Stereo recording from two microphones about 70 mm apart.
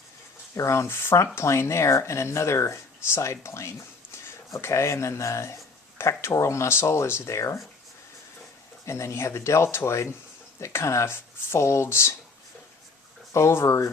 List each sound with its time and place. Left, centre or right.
0.5 s speech: left
8.9 s speech: left
13.3 s speech: left